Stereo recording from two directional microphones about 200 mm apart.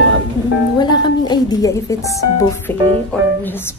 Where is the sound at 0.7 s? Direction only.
20° left (ahead or behind).